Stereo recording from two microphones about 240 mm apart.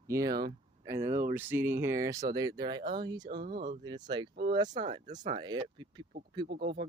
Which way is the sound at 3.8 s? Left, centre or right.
Centre.